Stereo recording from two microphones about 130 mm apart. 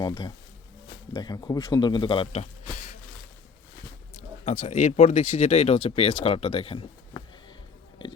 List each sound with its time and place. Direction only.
0.0 s speech: 30° left (ahead or behind)
4.2 s speech: 65° left (ahead or behind); by 7.2 s 40° left (ahead or behind)